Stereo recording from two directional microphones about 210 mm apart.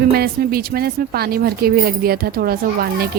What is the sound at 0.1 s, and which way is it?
Speech, 45° right (ahead or behind).